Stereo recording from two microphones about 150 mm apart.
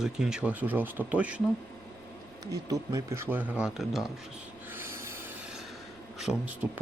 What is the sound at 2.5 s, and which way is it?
Speech, 25° right (ahead or behind).